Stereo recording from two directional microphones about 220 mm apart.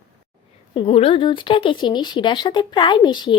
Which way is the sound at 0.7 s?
25° left (ahead or behind).